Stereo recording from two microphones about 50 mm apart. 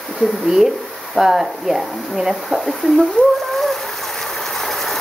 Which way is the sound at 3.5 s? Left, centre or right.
Centre.